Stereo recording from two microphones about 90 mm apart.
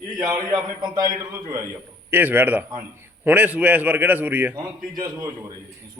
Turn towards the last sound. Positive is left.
turn(degrees=-35)  # may be behind; listen again after turning